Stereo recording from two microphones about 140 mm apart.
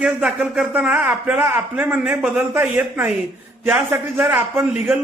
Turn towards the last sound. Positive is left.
turn(degrees=-10)  # may be behind; listen again after turning